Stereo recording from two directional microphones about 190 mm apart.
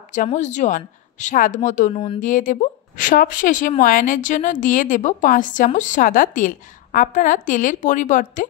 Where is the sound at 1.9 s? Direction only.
30° left (ahead or behind).